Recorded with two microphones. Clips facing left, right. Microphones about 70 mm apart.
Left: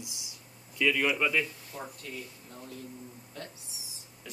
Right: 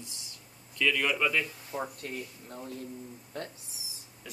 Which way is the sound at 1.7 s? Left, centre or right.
Centre.